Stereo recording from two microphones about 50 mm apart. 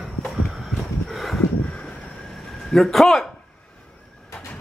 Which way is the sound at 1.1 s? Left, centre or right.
Centre.